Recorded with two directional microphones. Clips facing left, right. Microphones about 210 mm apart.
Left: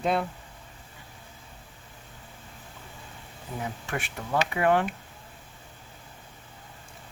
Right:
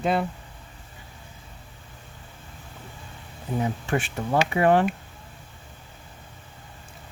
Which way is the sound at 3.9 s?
30° right (ahead or behind).